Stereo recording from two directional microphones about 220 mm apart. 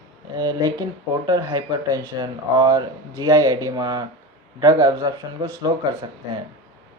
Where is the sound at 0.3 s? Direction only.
15° right (ahead or behind).